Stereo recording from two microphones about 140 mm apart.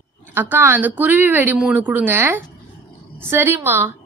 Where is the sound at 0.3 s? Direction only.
15° right (ahead or behind).